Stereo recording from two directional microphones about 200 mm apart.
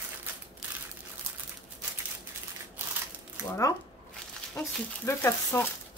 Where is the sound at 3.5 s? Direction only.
15° left (ahead or behind).